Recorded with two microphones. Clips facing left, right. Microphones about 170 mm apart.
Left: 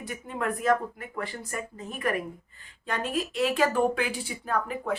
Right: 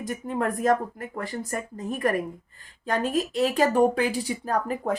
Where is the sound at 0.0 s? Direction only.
45° right (ahead or behind).